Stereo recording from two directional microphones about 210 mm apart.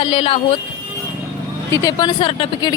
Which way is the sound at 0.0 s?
25° left (ahead or behind).